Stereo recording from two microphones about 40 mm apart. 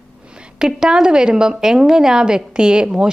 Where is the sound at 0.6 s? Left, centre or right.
Centre.